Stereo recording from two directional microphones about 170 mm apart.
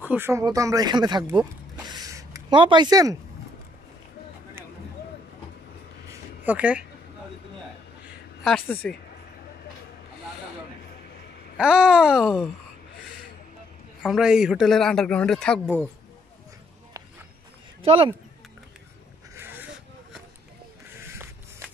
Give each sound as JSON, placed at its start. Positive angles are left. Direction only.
{"t": 0.0, "sound": "speech", "side_deg": -10}
{"t": 1.2, "sound": "speech", "side_deg": -15}
{"t": 1.9, "sound": "a sound", "side_deg": -20}
{"t": 2.6, "sound": "speech", "side_deg": -25}
{"t": 6.4, "sound": "speech", "side_deg": -10}
{"t": 8.8, "sound": "speech", "side_deg": 5}
{"t": 11.5, "sound": "a man's voice", "side_deg": -5}
{"t": 14.0, "sound": "a man's voice", "side_deg": -5}
{"t": 17.8, "sound": "speech", "side_deg": -30}
{"t": 19.3, "sound": "a sound", "side_deg": -10}